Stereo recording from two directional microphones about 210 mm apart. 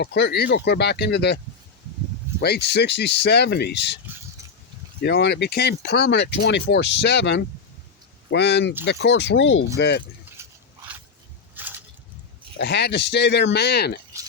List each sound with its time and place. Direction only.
0.0 s speech: 55° left (ahead or behind)
2.4 s speech: 50° left (ahead or behind)
5.0 s speech: 55° left (ahead or behind)
10.4 s dog: 15° right (ahead or behind)
11.6 s a sound: 10° right (ahead or behind)
12.5 s speech: 55° left (ahead or behind)